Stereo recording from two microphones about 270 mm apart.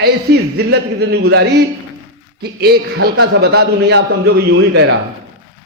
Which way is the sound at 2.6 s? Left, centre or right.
Right.